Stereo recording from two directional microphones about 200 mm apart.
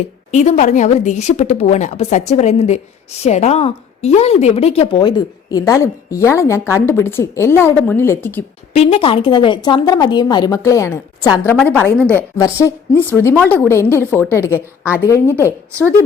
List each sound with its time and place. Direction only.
0.3 s a woman's voice: 35° left (ahead or behind); by 8.4 s 10° left (ahead or behind)
8.7 s a woman's voice: 30° left (ahead or behind); by 14.5 s 10° left (ahead or behind)
14.5 s a woman's voice: 10° right (ahead or behind)
15.0 s a woman's voice: 15° left (ahead or behind)